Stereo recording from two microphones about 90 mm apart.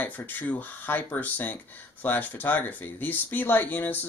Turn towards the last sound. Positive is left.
turn(degrees=20)  # may be behind; listen again after turning